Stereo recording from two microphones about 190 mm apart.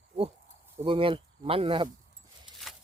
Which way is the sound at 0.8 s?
25° right (ahead or behind).